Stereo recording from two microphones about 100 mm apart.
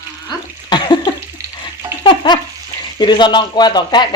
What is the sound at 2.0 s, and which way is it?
Stir, 50° left (ahead or behind).